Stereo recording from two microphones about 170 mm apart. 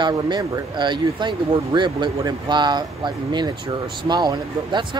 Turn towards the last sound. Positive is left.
turn(degrees=-25)  # may be behind; listen again after turning